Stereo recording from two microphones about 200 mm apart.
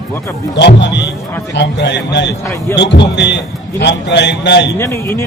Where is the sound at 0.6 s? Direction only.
60° left (ahead or behind).